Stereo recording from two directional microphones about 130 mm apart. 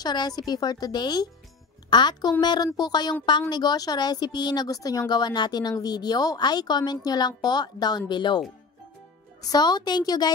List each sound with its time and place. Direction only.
0.0 s speech: 35° left (ahead or behind)
9.4 s speech: 30° left (ahead or behind)